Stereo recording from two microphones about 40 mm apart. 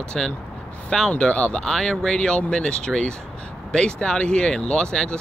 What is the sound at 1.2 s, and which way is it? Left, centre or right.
Speech, left.